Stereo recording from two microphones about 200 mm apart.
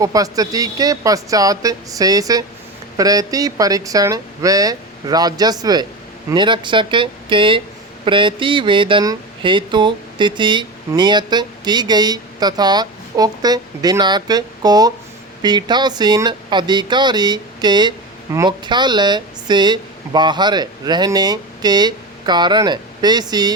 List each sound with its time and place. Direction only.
0.0 s speech: 15° right (ahead or behind)